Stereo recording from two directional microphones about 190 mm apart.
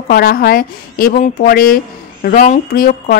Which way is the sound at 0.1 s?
50° left (ahead or behind).